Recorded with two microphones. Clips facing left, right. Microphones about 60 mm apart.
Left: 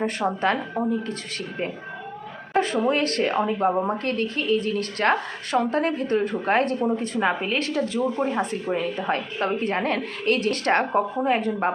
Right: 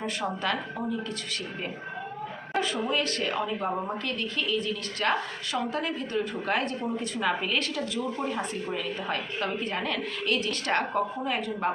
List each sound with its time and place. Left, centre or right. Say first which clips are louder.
0.0 s a woman's voice: left 7 dB; left
2.5 s dog: left 7 dB; left
2.8 s a woman's voice: left 6 dB; left